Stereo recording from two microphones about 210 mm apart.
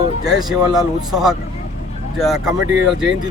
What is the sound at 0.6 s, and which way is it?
Speech, 20° right (ahead or behind).